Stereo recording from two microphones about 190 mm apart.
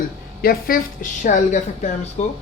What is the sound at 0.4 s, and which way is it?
A woman's voice, 50° left (ahead or behind).